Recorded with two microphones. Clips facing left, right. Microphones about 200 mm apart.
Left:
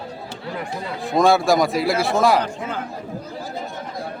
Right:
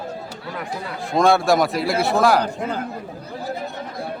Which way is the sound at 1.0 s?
Centre (ahead or behind).